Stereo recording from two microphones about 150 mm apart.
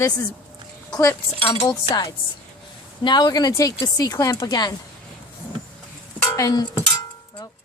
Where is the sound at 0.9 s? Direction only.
20° left (ahead or behind).